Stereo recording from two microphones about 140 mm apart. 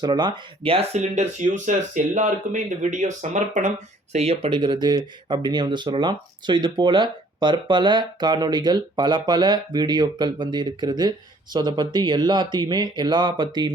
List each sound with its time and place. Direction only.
0.0 s speech: 30° right (ahead or behind); by 3.7 s 60° right (ahead or behind)
4.1 s speech: 45° right (ahead or behind)